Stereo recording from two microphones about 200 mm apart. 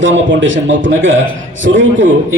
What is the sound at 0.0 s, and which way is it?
A man's voice, 70° right (ahead or behind).